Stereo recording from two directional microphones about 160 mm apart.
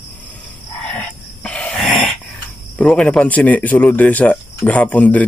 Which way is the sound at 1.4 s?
5° left (ahead or behind).